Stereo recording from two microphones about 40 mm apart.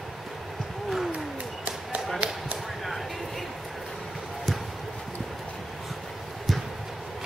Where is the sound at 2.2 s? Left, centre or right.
Right.